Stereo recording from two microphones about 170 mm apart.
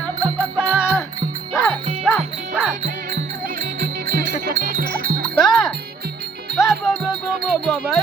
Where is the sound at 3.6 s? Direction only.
65° right (ahead or behind).